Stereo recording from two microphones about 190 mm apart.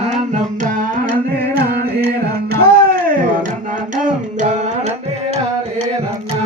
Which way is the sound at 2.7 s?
50° right (ahead or behind).